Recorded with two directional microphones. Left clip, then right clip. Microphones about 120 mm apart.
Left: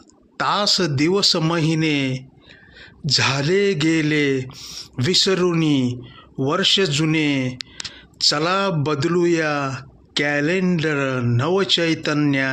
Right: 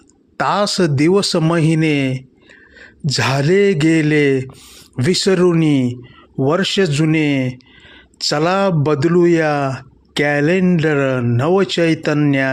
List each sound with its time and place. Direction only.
0.3 s speech: 55° right (ahead or behind)
4.4 s speech: 35° right (ahead or behind)
4.9 s speech: 50° right (ahead or behind)